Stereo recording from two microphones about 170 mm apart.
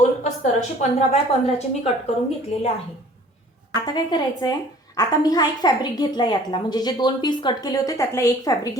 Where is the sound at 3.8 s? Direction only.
25° left (ahead or behind).